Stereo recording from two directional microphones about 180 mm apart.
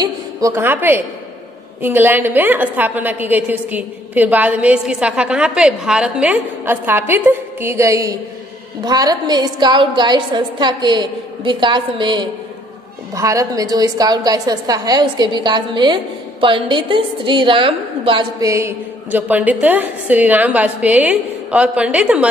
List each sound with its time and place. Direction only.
0.0 s a woman's voice: 15° right (ahead or behind)
18.4 s a woman's voice: 15° right (ahead or behind)